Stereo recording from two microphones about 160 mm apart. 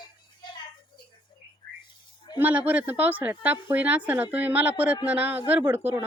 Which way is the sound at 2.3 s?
10° right (ahead or behind).